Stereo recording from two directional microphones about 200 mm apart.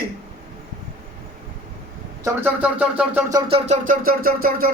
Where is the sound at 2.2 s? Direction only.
10° right (ahead or behind).